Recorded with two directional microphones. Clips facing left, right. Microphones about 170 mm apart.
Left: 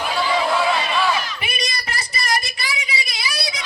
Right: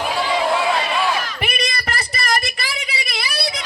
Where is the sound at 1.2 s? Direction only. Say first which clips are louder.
Right 4 dB; 60° right (ahead or behind).